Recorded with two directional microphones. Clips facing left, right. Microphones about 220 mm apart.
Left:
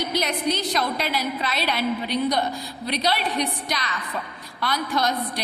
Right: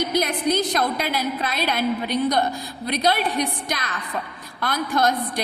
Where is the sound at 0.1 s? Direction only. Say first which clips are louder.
Right 3 dB; 50° right (ahead or behind).